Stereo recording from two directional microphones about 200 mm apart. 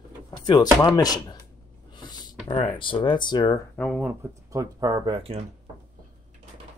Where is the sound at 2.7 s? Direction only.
25° left (ahead or behind).